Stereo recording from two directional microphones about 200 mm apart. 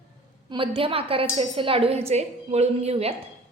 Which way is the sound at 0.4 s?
25° right (ahead or behind).